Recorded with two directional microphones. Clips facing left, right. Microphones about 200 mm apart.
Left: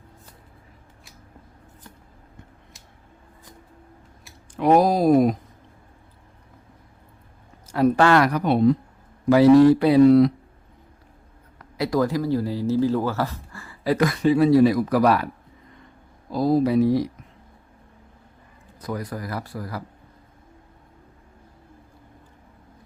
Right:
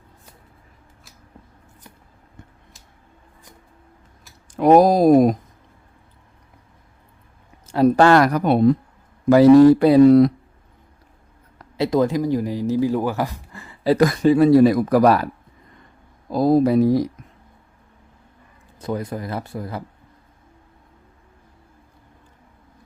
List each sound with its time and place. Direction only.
4.5 s speech: 45° right (ahead or behind)
7.7 s speech: 35° right (ahead or behind)
11.8 s speech: 20° right (ahead or behind)
14.0 s speech: 40° right (ahead or behind)
16.3 s speech: 50° right (ahead or behind)
18.8 s speech: 25° right (ahead or behind)